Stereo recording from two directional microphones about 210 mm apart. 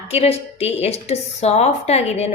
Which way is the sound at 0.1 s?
30° left (ahead or behind).